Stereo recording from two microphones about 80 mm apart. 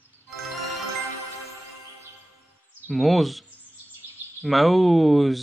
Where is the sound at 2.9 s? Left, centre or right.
Centre.